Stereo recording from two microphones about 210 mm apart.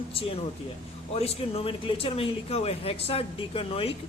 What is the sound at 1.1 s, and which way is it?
Speech, 30° left (ahead or behind).